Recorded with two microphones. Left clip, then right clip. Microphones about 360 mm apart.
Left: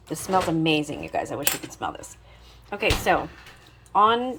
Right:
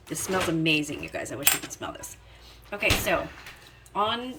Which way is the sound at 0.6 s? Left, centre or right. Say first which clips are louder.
Left 2 dB; centre.